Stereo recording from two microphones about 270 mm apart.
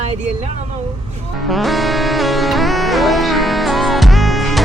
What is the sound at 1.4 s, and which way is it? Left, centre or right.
Music, centre.